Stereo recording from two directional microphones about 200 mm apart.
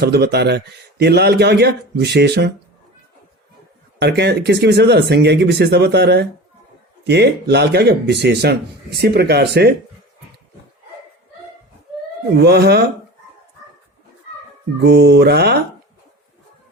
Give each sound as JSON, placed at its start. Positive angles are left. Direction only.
{"t": 0.0, "sound": "speech", "side_deg": -55}
{"t": 4.0, "sound": "speech", "side_deg": -55}
{"t": 12.4, "sound": "speech", "side_deg": -55}
{"t": 14.8, "sound": "speech", "side_deg": -55}